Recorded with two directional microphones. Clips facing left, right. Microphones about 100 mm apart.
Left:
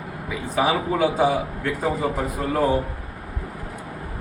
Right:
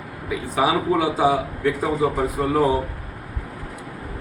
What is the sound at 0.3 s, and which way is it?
A man's voice, 5° right (ahead or behind).